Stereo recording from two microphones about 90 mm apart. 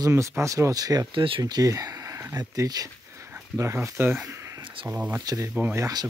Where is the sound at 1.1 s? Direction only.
75° right (ahead or behind).